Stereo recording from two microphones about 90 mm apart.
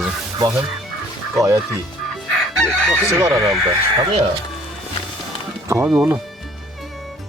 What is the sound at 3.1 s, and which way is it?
Speech, 35° right (ahead or behind).